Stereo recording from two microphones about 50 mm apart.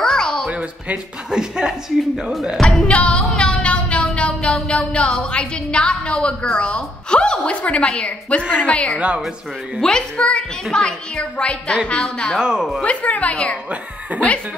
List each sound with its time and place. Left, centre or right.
0.0 s a sound: centre
0.5 s speech: right
1.3 s speech: centre
2.6 s music: left
4.6 s a woman's voice: left
9.8 s a woman's voice: centre
12.4 s speech: centre
12.8 s a woman's voice: left